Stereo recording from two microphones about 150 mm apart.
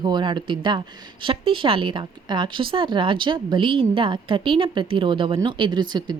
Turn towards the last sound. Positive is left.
turn(degrees=-30)  # may be behind; listen again after turning